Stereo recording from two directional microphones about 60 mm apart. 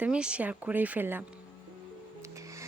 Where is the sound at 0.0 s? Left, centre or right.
Centre; by 1.2 s right.